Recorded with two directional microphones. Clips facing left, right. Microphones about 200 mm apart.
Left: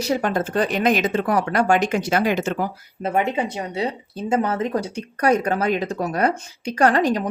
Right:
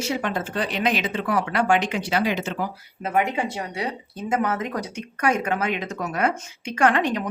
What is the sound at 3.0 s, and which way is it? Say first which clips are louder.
Speech: left 2 dB; 25° left (ahead or behind).